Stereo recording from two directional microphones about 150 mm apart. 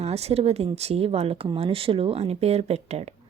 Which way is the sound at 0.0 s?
45° right (ahead or behind).